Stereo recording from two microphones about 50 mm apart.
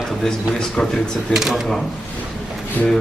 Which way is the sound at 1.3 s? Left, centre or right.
Centre.